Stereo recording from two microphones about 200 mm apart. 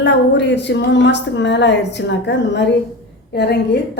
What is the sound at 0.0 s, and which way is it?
A woman's voice, 60° left (ahead or behind).